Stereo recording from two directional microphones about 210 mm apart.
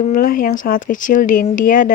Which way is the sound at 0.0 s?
40° left (ahead or behind).